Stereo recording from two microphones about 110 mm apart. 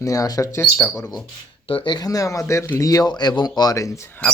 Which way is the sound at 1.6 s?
50° left (ahead or behind).